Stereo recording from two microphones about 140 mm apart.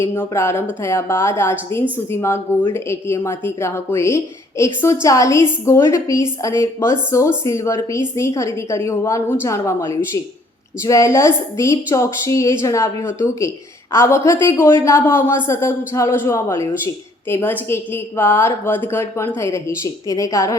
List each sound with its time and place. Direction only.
0.2 s a woman's voice: 15° left (ahead or behind)